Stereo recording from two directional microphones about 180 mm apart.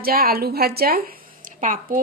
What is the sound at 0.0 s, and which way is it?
A woman's voice, 55° right (ahead or behind).